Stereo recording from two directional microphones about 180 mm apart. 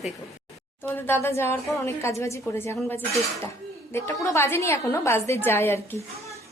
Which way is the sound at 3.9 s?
15° left (ahead or behind).